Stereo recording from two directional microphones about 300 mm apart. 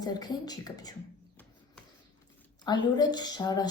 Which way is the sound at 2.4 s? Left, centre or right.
Centre.